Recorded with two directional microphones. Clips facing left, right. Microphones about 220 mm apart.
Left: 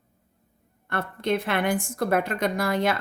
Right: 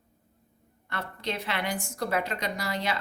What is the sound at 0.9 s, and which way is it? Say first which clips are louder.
A woman's voice: left 8 dB; 55° left (ahead or behind).